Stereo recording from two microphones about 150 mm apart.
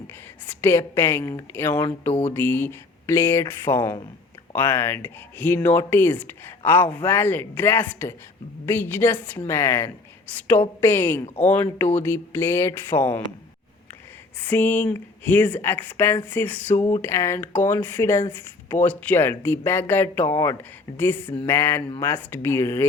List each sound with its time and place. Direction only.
0.4 s speech: 15° left (ahead or behind)
14.4 s speech: 10° left (ahead or behind)